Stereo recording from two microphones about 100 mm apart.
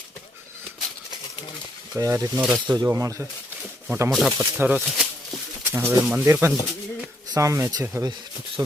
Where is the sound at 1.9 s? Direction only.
30° right (ahead or behind).